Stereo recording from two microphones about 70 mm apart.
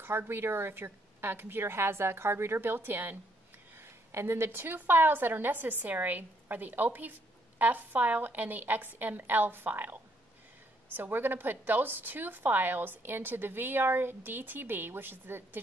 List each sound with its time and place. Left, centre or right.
0.0 s a woman's voice: right
11.0 s a woman's voice: right